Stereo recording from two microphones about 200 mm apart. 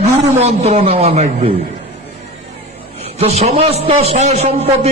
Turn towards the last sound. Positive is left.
turn(degrees=-30)  # may be behind; listen again after turning